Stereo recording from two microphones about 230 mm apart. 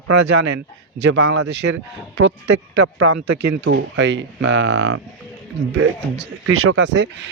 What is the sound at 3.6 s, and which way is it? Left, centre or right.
Speech, right.